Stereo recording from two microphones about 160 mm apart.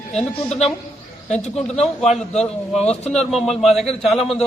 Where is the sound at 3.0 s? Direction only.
45° left (ahead or behind).